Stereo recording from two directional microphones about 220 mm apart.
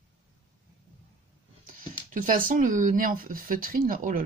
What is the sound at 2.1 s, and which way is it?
Speech, 35° right (ahead or behind).